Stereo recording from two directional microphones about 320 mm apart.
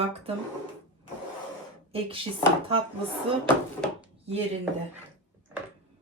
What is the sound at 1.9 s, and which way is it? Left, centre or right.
Speech, centre.